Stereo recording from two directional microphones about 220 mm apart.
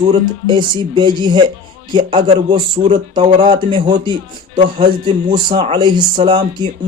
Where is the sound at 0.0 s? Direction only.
20° right (ahead or behind).